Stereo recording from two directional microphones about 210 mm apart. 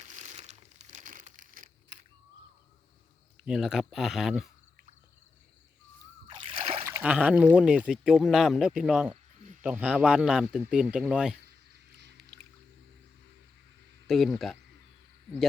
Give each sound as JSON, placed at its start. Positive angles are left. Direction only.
{"t": 0.0, "sound": "crumpling", "side_deg": -35}
{"t": 3.4, "sound": "speech", "side_deg": 0}
{"t": 6.3, "sound": "splash", "side_deg": -25}
{"t": 6.8, "sound": "speech", "side_deg": -10}
{"t": 14.1, "sound": "speech", "side_deg": 0}